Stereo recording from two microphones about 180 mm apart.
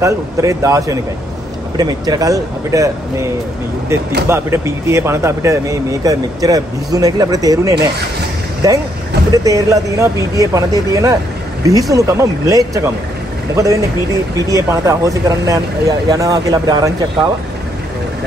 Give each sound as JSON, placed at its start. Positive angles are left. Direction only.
{"t": 0.0, "sound": "speech", "side_deg": -15}
{"t": 4.3, "sound": "speech", "side_deg": -15}